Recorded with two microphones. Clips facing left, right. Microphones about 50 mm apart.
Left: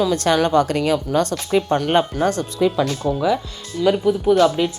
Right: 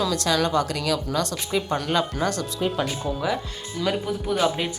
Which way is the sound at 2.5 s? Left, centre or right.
Left.